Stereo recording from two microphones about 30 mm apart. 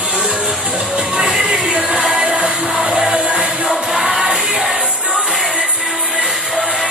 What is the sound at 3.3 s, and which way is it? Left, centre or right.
Music, centre.